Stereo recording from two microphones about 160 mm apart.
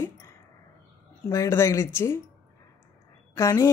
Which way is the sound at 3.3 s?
20° left (ahead or behind).